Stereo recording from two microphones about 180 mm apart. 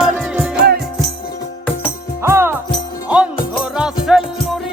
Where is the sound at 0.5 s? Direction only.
60° right (ahead or behind).